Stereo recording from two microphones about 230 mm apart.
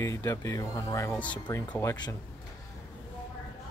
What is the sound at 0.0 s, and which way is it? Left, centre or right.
Speech, centre.